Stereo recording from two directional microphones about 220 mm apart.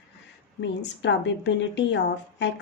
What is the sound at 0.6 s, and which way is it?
A woman's voice, 55° left (ahead or behind).